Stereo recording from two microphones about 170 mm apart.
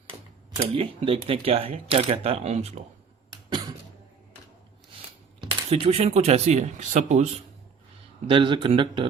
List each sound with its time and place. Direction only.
0.7 s speech: 35° right (ahead or behind)
5.4 s speech: 30° right (ahead or behind)
8.3 s a man's voice: 30° right (ahead or behind)